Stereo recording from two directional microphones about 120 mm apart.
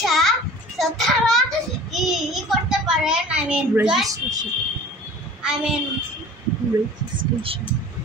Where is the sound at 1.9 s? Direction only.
Centre (ahead or behind).